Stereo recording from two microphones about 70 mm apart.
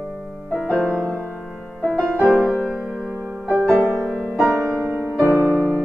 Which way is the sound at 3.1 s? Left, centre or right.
Right.